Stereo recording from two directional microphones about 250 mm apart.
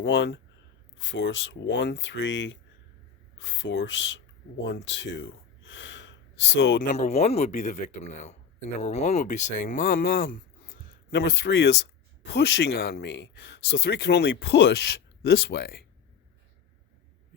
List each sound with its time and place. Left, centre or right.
0.0 s speech: left